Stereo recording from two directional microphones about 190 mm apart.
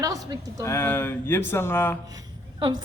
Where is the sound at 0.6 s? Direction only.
10° left (ahead or behind).